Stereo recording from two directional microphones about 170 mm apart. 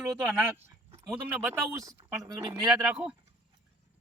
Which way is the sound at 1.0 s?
5° right (ahead or behind).